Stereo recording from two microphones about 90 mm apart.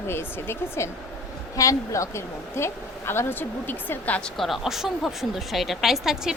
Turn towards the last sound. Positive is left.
turn(degrees=-5)  # may be behind; listen again after turning